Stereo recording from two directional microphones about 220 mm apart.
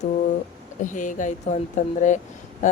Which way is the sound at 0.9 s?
35° left (ahead or behind).